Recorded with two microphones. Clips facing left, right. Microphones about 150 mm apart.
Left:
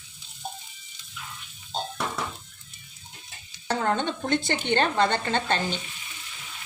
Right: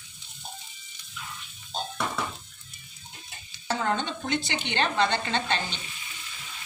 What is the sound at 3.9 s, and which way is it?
Speech, 50° left (ahead or behind).